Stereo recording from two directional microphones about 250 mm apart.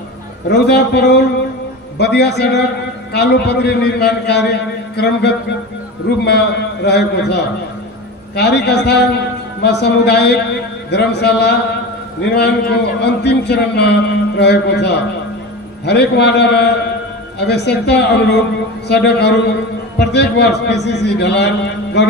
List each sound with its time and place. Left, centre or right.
0.5 s a man's voice: left